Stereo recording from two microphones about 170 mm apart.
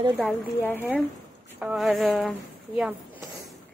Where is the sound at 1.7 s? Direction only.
Centre (ahead or behind).